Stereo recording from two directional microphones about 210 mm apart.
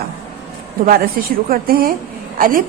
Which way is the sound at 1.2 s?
45° right (ahead or behind).